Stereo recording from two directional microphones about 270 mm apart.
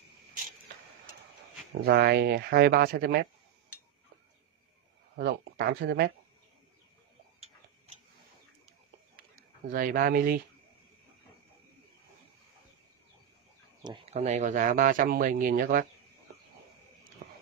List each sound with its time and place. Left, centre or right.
1.9 s speech: right
5.1 s speech: right
9.7 s speech: right
13.8 s speech: centre
17.2 s biting: right